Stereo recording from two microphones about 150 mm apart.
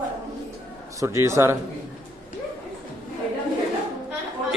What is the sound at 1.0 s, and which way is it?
Speech, 20° right (ahead or behind).